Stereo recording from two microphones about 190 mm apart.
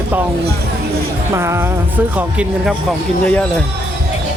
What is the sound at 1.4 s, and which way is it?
Speech, 15° right (ahead or behind).